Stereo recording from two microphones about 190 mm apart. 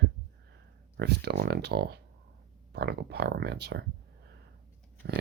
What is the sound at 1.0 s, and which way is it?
Speech, 60° right (ahead or behind).